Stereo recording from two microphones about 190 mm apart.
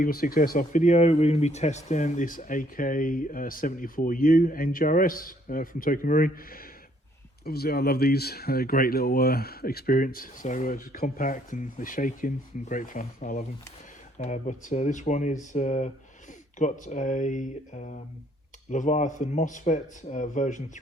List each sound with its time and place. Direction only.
0.0 s speech: 50° left (ahead or behind)